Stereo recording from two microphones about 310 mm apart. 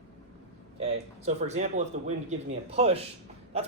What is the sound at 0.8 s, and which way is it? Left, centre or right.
Speech, right.